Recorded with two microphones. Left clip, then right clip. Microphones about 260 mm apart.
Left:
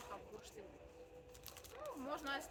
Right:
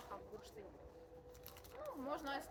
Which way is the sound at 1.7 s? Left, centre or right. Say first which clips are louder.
Right 1 dB; centre.